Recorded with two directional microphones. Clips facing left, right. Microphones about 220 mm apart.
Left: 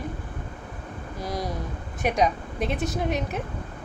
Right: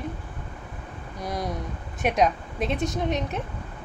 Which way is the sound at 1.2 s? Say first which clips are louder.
Even; centre (ahead or behind).